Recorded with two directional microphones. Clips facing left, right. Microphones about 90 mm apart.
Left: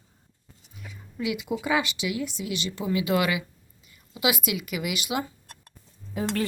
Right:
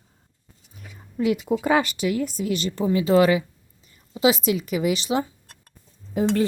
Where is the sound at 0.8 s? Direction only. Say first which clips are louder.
Right 7 dB; 40° right (ahead or behind).